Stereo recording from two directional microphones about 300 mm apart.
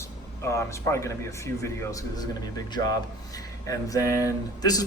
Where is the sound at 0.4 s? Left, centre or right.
Centre.